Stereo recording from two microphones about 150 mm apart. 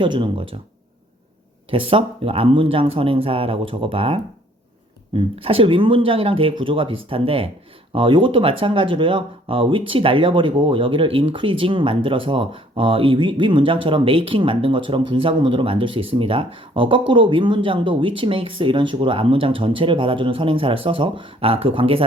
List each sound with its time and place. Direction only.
0.0 s speech: 35° right (ahead or behind)
1.7 s speech: 35° right (ahead or behind)